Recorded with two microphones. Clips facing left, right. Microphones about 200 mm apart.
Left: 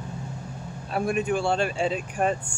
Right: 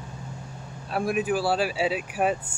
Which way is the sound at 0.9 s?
Centre (ahead or behind).